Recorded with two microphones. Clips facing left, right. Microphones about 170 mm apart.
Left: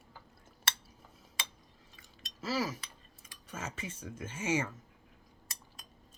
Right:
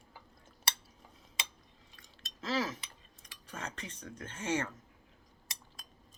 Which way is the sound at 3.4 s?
5° left (ahead or behind).